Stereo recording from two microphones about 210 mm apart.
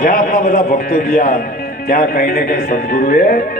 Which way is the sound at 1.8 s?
45° left (ahead or behind).